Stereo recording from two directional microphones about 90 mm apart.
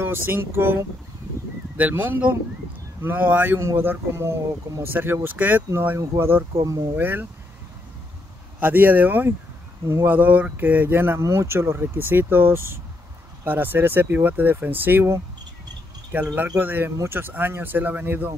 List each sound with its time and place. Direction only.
0.0 s speech: 25° right (ahead or behind)
1.8 s speech: 20° right (ahead or behind)
6.6 s speech: 40° right (ahead or behind)
7.0 s speech: 20° right (ahead or behind)
8.5 s speech: 20° right (ahead or behind)
10.1 s speech: 20° right (ahead or behind)